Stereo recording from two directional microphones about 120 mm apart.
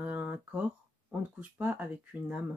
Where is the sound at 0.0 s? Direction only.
15° right (ahead or behind).